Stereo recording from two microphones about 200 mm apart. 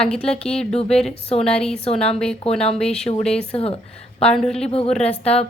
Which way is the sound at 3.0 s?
30° left (ahead or behind).